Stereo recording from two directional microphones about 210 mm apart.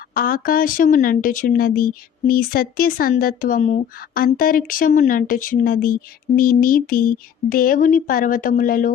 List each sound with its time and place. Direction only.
0.1 s speech: 45° left (ahead or behind)